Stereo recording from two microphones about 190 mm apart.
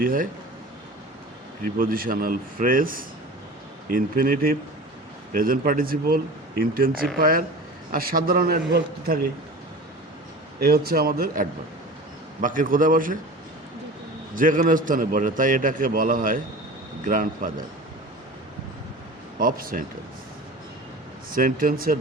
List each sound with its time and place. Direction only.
0.0 s a man's voice: 45° right (ahead or behind)
1.6 s a man's voice: 50° right (ahead or behind)
10.6 s a man's voice: 55° right (ahead or behind)
14.3 s a man's voice: 45° right (ahead or behind)
19.4 s a man's voice: 50° right (ahead or behind)
21.2 s a man's voice: 50° right (ahead or behind)